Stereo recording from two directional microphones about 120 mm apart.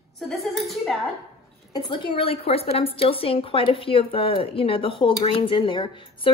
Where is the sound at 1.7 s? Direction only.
40° left (ahead or behind).